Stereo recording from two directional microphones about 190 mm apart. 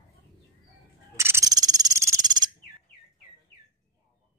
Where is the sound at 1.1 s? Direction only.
15° right (ahead or behind).